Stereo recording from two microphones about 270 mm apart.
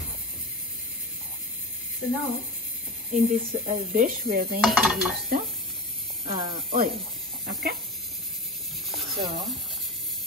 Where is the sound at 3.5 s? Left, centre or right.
Right.